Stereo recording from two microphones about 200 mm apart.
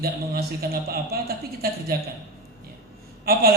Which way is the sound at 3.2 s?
50° right (ahead or behind).